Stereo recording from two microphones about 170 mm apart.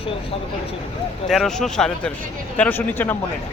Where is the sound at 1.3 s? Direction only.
Centre (ahead or behind).